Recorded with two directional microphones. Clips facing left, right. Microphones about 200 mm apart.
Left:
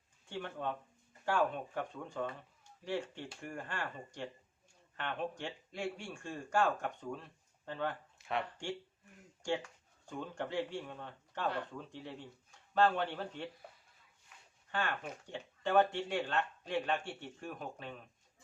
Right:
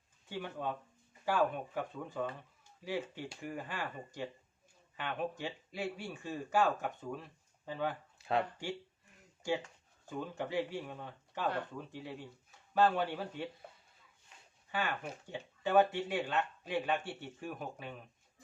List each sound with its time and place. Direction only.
0.3 s speech: 5° right (ahead or behind)
8.2 s speech: 30° right (ahead or behind)
9.4 s speech: 5° right (ahead or behind)
14.7 s speech: 5° right (ahead or behind)